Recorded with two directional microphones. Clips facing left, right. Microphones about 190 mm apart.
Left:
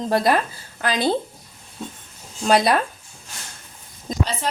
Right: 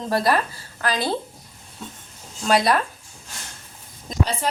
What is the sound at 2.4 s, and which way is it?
Speech, 20° left (ahead or behind).